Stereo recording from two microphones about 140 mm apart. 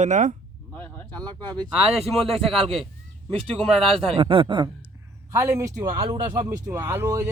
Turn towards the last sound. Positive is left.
turn(degrees=-20)  # may be behind; listen again after turning